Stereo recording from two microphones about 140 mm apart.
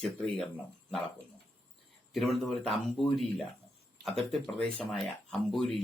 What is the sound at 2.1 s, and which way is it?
Speech, centre (ahead or behind).